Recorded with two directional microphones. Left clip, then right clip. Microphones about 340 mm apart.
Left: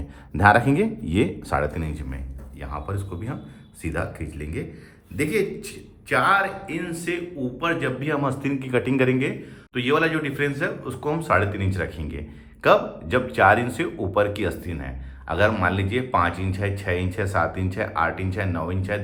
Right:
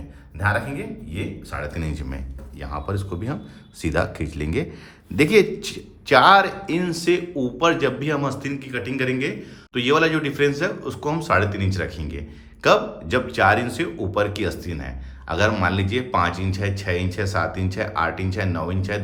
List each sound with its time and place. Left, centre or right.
0.3 s speech: centre
1.7 s speech: centre